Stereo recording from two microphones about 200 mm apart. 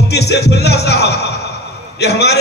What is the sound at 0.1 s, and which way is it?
A man's voice, 55° left (ahead or behind).